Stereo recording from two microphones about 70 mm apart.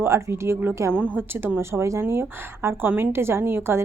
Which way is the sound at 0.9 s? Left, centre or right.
Right.